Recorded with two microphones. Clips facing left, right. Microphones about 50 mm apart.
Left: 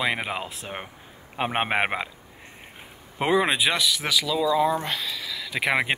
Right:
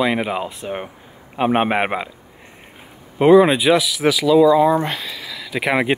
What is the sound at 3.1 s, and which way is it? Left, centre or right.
Speech, centre.